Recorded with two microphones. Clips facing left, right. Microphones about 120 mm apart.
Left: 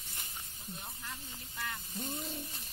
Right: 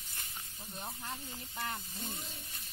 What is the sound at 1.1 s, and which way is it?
Speech, 35° right (ahead or behind).